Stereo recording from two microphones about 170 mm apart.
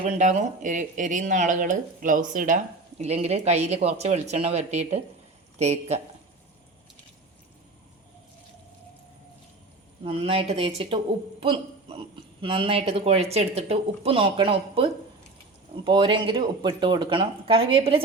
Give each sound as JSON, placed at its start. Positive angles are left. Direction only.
{"t": 0.0, "sound": "speech", "side_deg": -45}
{"t": 3.0, "sound": "a woman's voice", "side_deg": -40}
{"t": 10.0, "sound": "a woman's voice", "side_deg": -35}